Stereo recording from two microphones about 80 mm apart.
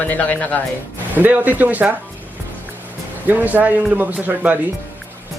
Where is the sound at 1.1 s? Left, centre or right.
Right.